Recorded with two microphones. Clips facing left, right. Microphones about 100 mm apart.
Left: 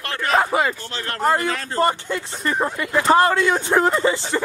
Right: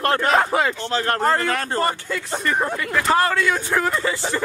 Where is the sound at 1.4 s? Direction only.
55° right (ahead or behind).